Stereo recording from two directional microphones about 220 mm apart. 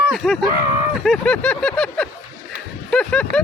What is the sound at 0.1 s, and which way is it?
Speech, centre (ahead or behind).